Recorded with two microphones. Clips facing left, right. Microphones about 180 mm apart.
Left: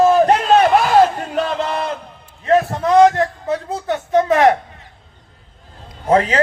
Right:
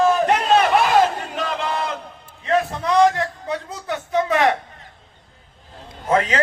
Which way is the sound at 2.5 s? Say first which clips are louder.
Left 5 dB; 40° left (ahead or behind).